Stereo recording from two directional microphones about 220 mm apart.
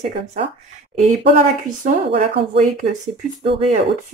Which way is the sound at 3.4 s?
25° right (ahead or behind).